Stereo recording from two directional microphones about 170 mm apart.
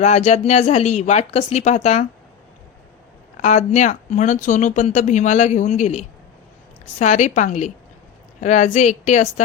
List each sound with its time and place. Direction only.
0.0 s speech: 40° left (ahead or behind)
3.4 s speech: 45° left (ahead or behind)